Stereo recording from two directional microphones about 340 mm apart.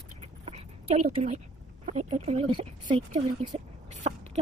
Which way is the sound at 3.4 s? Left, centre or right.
Centre.